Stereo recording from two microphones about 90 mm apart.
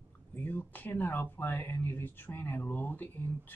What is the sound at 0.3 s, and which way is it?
Speech, 20° left (ahead or behind).